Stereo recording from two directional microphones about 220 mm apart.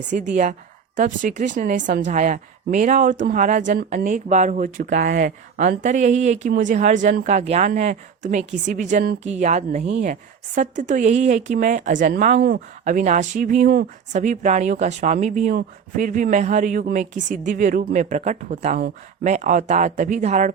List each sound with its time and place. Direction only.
0.2 s a woman's voice: 35° right (ahead or behind)